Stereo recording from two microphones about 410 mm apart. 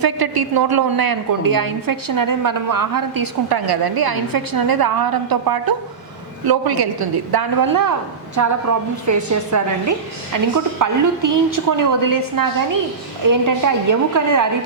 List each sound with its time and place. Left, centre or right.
0.0 s a woman's voice: right
8.4 s a woman's voice: right